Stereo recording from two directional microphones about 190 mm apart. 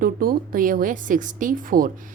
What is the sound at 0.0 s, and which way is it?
A woman's voice, 50° right (ahead or behind).